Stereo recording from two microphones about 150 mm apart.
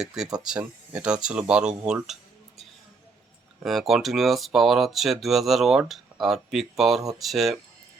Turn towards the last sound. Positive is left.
turn(degrees=0)  # may be behind; listen again after turning